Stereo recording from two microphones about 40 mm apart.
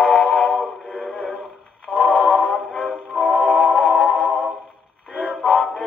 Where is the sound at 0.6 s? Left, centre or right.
Centre.